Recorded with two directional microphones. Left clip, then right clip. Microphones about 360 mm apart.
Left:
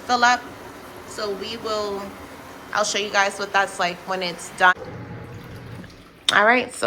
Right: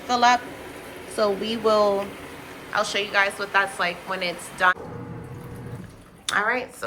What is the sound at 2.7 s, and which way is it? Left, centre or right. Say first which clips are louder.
A woman's voice: left 2 dB; centre.